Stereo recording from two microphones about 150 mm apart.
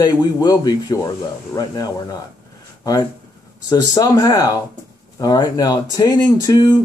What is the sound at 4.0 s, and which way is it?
Speech, 25° left (ahead or behind).